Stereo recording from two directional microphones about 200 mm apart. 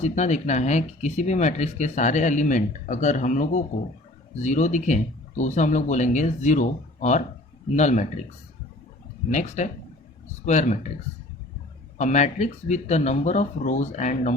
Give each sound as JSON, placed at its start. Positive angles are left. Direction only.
{"t": 0.0, "sound": "speech", "side_deg": 35}
{"t": 9.3, "sound": "speech", "side_deg": 35}
{"t": 11.9, "sound": "speech", "side_deg": 35}